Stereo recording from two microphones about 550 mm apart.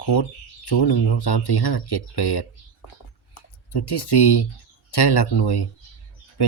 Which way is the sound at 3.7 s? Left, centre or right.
Left.